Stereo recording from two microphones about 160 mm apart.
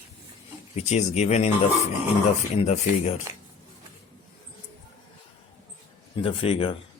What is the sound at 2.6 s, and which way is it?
Speech, 40° left (ahead or behind).